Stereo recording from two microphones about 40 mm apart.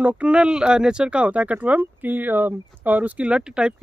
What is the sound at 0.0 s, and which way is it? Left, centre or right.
Speech, right.